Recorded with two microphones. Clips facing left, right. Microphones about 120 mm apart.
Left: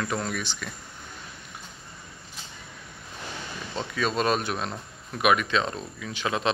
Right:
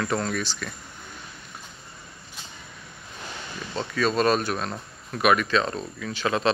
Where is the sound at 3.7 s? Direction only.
15° left (ahead or behind).